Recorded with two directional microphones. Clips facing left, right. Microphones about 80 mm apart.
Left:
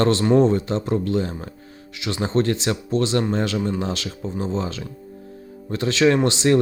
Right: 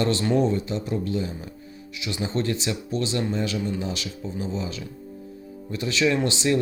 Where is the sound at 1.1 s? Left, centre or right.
Left.